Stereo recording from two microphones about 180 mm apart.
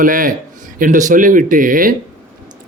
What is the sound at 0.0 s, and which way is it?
A man's voice, 50° right (ahead or behind).